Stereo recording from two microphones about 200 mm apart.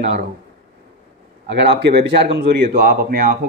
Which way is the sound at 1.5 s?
55° right (ahead or behind).